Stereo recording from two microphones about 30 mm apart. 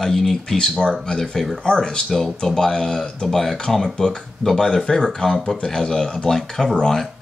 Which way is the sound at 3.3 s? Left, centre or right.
Centre.